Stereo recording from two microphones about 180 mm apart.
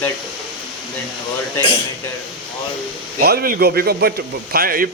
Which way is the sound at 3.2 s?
55° right (ahead or behind).